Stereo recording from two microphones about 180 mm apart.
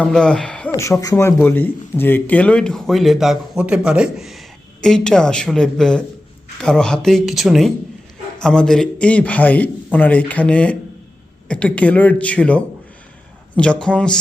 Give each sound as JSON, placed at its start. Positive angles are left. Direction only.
{"t": 0.0, "sound": "speech", "side_deg": 5}
{"t": 0.8, "sound": "a man's voice", "side_deg": 15}